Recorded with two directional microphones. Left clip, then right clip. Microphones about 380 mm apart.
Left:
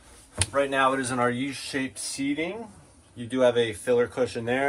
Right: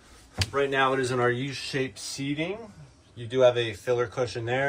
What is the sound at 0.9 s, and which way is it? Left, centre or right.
Speech, centre.